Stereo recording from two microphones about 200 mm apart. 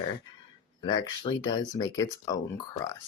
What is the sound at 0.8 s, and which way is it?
Speech, 25° left (ahead or behind).